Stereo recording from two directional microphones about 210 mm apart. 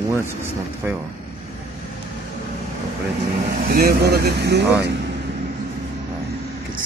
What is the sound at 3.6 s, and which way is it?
Speech, 45° right (ahead or behind).